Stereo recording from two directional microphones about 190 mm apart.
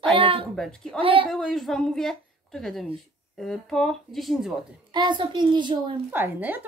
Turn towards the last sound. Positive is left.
turn(degrees=-10)  # may be behind; listen again after turning